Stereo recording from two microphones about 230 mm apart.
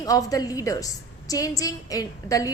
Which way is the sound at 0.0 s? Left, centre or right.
Centre.